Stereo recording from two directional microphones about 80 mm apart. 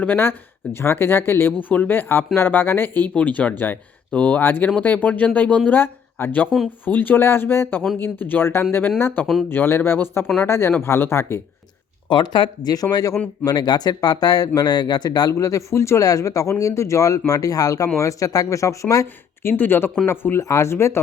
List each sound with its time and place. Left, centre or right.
0.0 s speech: left
9.2 s speech: centre
9.5 s speech: left
12.0 s speech: left
19.4 s speech: left